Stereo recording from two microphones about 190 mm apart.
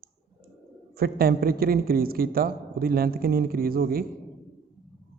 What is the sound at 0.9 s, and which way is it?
A man's voice, 50° right (ahead or behind).